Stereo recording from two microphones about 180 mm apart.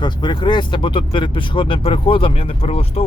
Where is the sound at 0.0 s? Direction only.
25° left (ahead or behind).